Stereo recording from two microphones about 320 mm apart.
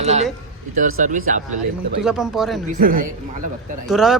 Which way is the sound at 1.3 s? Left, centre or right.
Right.